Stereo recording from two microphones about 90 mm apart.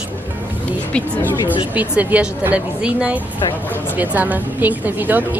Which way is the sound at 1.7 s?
15° right (ahead or behind).